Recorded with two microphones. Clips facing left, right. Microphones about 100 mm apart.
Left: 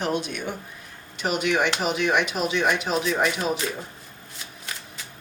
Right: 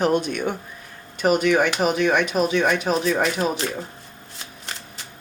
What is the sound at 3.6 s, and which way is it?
Speech, 45° right (ahead or behind).